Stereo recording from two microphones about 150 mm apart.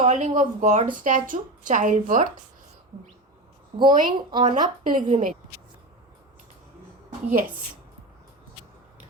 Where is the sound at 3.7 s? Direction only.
30° right (ahead or behind).